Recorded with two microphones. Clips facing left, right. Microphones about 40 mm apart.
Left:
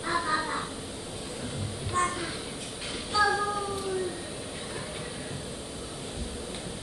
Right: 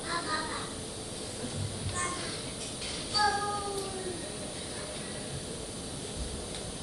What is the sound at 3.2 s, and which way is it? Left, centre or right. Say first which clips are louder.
Child singing: left 4 dB; left.